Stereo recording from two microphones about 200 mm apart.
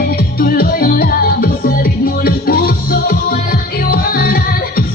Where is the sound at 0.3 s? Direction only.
50° left (ahead or behind).